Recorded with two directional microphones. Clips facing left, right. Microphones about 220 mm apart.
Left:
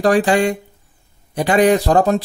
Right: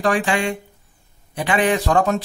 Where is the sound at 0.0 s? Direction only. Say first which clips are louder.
Left 6 dB; 35° left (ahead or behind).